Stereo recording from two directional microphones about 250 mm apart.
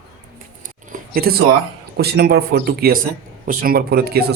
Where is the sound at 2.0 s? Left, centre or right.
Right.